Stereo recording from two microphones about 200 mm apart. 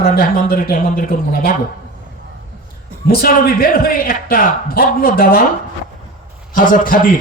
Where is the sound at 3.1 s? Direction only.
50° left (ahead or behind).